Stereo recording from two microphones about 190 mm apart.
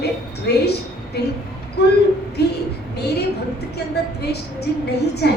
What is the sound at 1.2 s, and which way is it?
A woman's voice, 60° left (ahead or behind).